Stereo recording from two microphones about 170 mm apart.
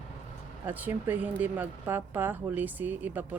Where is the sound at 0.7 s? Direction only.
10° right (ahead or behind).